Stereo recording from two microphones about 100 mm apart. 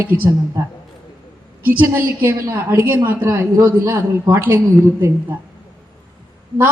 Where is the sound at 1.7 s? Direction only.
20° right (ahead or behind).